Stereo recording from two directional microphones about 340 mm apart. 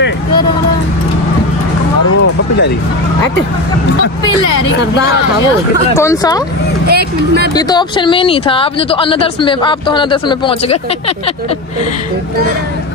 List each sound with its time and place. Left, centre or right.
5.9 s speech: centre
6.9 s speech: right
7.5 s speech: centre